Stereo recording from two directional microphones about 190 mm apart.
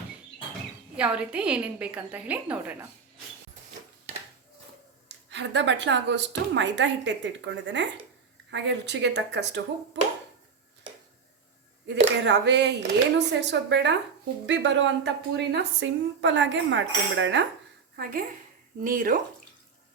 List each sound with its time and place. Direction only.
0.9 s a woman's voice: 5° right (ahead or behind)
5.0 s a woman's voice: 70° right (ahead or behind)
11.9 s a woman's voice: 65° right (ahead or behind)
17.9 s a woman's voice: 50° right (ahead or behind)